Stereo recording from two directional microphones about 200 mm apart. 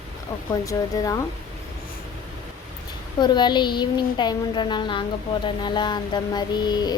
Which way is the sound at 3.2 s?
20° left (ahead or behind).